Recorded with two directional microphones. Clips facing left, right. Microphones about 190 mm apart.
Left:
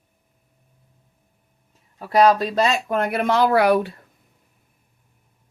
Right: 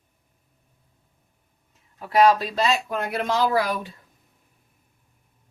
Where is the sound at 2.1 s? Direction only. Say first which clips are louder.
Left 2 dB; 40° left (ahead or behind); by 4.0 s 65° left (ahead or behind).